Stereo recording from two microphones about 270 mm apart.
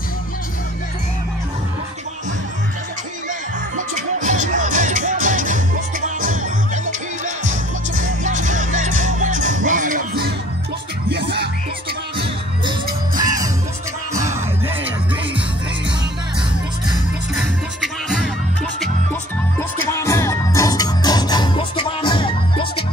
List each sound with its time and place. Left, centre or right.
3.7 s music: right
13.2 s music: centre
17.7 s music: centre
19.9 s music: centre